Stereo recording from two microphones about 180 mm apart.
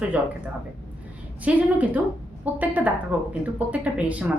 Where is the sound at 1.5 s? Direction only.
5° right (ahead or behind).